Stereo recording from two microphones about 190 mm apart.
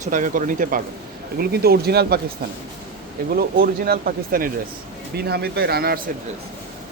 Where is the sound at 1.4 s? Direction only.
55° right (ahead or behind).